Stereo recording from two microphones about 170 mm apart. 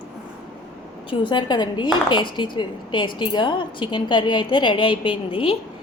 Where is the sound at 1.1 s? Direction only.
25° left (ahead or behind).